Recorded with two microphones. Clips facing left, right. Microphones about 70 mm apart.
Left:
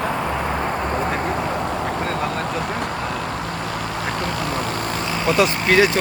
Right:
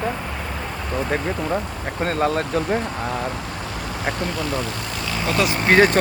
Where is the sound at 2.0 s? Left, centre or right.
Right.